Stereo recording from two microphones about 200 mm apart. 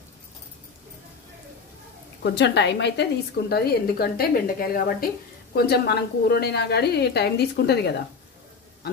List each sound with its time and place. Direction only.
2.2 s a woman's voice: 60° left (ahead or behind)